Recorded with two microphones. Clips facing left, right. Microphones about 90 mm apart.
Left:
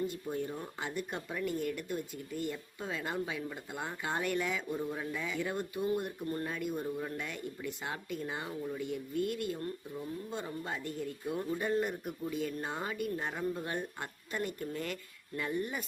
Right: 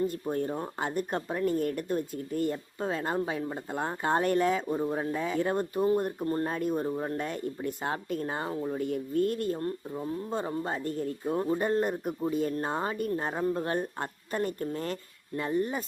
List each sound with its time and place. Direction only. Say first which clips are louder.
0.1 s speech: right 6 dB; 50° right (ahead or behind); by 15.8 s 35° right (ahead or behind)